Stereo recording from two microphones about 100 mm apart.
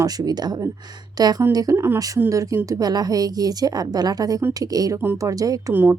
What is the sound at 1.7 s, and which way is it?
Speech, 25° right (ahead or behind).